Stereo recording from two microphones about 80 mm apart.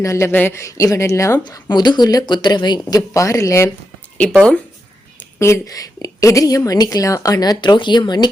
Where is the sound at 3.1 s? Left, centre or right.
Left.